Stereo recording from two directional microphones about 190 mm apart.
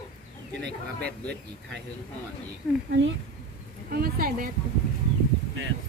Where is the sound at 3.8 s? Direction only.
50° right (ahead or behind).